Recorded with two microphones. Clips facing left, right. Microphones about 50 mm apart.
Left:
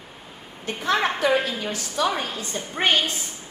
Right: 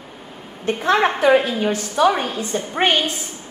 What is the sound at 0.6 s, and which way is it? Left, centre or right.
A woman's voice, right.